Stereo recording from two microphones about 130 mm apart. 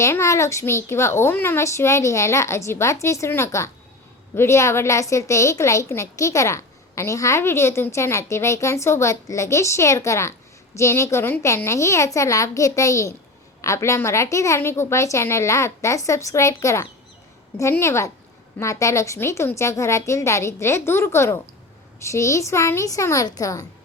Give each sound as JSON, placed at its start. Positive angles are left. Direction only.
{"t": 0.0, "sound": "a woman's voice", "side_deg": 20}